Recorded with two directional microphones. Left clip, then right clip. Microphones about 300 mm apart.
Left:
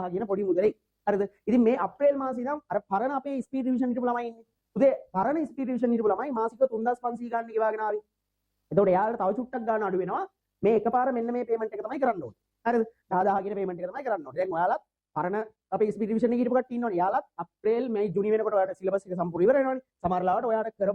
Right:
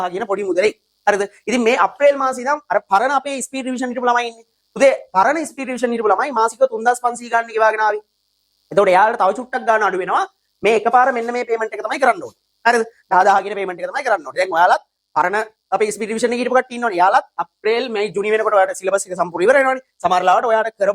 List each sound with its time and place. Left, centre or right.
0.0 s speech: centre
6.6 s speech: centre
6.8 s speech: centre